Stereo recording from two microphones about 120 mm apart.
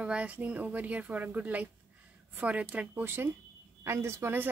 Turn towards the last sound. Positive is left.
turn(degrees=-20)  # may be behind; listen again after turning